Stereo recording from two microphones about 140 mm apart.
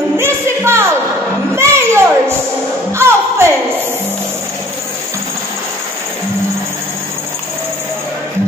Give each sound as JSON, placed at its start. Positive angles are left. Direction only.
{"t": 0.2, "sound": "music", "side_deg": -20}
{"t": 1.5, "sound": "a sound", "side_deg": -20}
{"t": 2.9, "sound": "music", "side_deg": -20}